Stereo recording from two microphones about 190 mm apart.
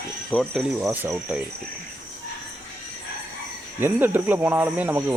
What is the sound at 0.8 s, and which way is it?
Speech, 10° right (ahead or behind).